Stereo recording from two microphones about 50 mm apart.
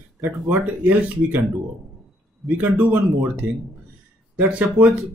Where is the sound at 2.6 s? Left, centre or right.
Right.